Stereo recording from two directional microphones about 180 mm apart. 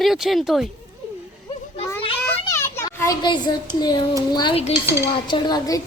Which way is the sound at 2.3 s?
15° left (ahead or behind).